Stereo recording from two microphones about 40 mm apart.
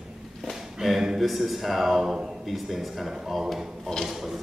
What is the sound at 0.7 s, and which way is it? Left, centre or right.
A man's voice, centre.